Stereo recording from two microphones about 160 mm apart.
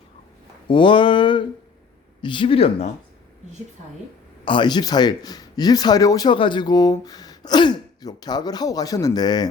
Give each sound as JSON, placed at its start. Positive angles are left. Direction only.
{"t": 0.7, "sound": "a sound", "side_deg": 30}
{"t": 2.2, "sound": "speech", "side_deg": 30}
{"t": 4.4, "sound": "a man's voice", "side_deg": 30}